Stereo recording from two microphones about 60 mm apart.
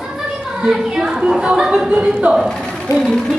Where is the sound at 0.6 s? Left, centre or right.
Centre.